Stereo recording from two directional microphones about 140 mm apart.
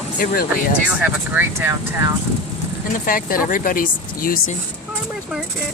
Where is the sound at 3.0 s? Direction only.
85° left.